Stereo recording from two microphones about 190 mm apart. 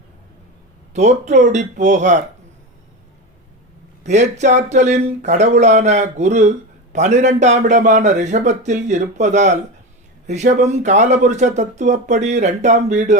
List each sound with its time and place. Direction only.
0.9 s speech: 40° right (ahead or behind)
4.0 s speech: 35° right (ahead or behind)